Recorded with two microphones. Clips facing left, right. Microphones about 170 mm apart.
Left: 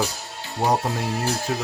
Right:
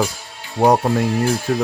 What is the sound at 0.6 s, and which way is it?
Speech, 65° right (ahead or behind).